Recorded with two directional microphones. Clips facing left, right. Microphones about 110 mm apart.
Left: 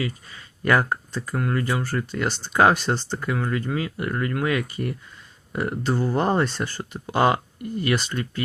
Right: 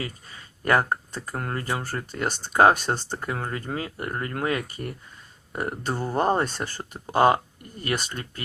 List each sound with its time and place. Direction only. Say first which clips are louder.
0.0 s speech: left 5 dB; 40° right (ahead or behind)